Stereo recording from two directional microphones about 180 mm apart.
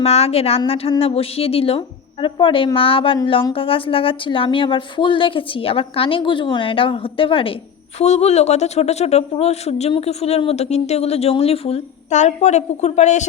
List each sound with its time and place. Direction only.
0.0 s a woman's voice: 35° left (ahead or behind)